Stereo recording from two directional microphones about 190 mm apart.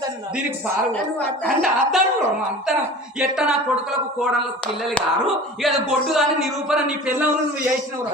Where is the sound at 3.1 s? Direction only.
5° right (ahead or behind).